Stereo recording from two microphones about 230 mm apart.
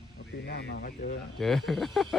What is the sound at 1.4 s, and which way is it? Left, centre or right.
Speech, centre.